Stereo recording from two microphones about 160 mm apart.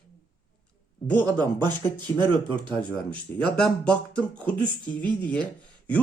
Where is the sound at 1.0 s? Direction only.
10° left (ahead or behind).